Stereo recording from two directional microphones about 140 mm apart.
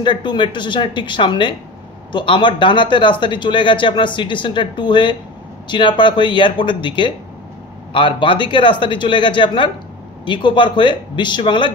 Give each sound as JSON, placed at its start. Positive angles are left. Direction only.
{"t": 0.0, "sound": "speech", "side_deg": 35}